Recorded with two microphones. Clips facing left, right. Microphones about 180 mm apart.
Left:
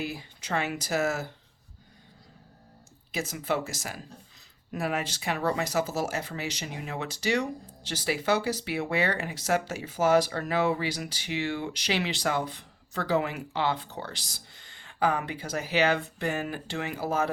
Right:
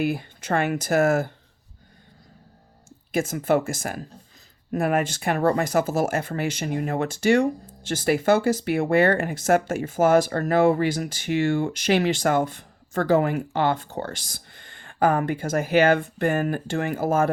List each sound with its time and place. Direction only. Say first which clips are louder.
0.0 s speech: right 10 dB; 55° right (ahead or behind)
3.1 s speech: right 8 dB; 50° right (ahead or behind)